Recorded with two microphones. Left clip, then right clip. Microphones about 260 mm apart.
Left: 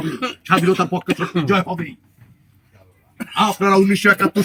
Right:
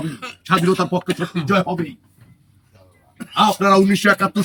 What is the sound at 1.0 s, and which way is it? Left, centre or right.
Speech, left.